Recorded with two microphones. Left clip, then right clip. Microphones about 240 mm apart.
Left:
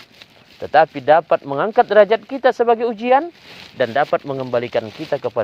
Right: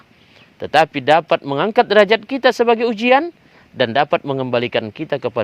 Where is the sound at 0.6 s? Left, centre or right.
Right.